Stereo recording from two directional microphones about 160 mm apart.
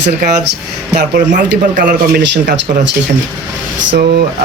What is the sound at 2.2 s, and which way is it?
Speech, 90° right.